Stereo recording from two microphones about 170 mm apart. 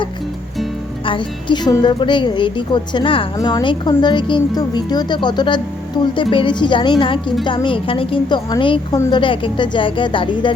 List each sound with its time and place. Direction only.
1.0 s speech: 30° left (ahead or behind)